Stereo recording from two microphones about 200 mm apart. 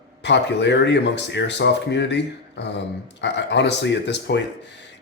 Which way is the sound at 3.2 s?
60° left (ahead or behind).